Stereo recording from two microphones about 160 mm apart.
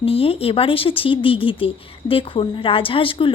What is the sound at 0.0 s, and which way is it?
Speech, 35° left (ahead or behind).